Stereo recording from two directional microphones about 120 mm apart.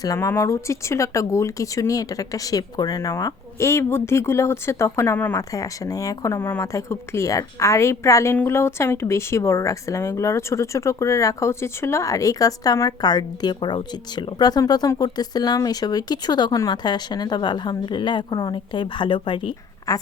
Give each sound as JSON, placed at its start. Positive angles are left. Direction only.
{"t": 0.2, "sound": "a woman's voice", "side_deg": 20}
{"t": 19.9, "sound": "speech", "side_deg": 30}